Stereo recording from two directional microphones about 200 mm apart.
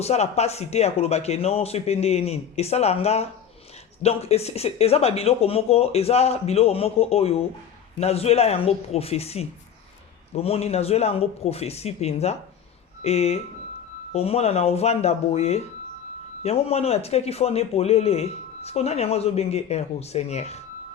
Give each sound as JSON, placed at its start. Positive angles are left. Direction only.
{"t": 0.0, "sound": "speech", "side_deg": 35}